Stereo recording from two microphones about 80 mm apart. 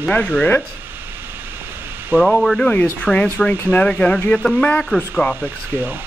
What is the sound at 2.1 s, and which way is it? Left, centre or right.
Speech, centre.